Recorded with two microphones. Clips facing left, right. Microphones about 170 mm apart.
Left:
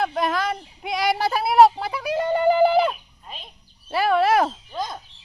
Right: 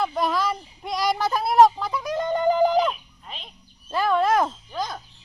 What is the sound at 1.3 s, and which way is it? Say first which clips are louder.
Speech: left 1 dB; 65° left (ahead or behind).